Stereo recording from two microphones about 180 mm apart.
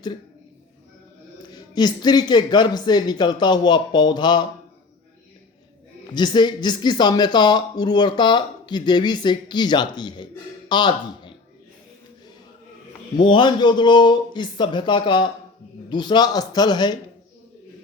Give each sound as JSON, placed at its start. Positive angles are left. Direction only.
{"t": 1.7, "sound": "speech", "side_deg": 25}
{"t": 6.1, "sound": "speech", "side_deg": 25}
{"t": 13.2, "sound": "speech", "side_deg": 25}